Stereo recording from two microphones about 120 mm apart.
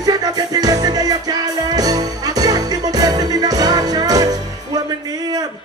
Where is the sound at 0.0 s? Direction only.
30° right (ahead or behind).